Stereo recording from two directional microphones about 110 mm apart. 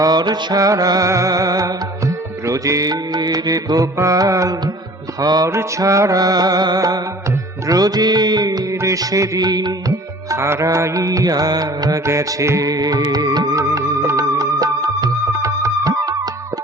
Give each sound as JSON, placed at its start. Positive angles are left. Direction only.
{"t": 0.0, "sound": "music", "side_deg": -40}
{"t": 10.2, "sound": "music", "side_deg": -25}